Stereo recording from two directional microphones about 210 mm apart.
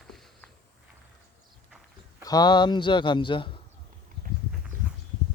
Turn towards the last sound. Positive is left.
turn(degrees=25)  # may be behind; listen again after turning